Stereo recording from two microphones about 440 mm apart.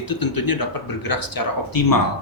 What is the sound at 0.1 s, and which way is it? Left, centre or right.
Speech, left.